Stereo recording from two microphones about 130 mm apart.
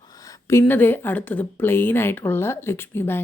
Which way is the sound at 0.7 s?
15° left (ahead or behind).